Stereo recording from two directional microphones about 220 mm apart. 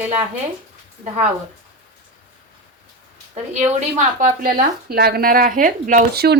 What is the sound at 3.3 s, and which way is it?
A woman's voice, 35° right (ahead or behind).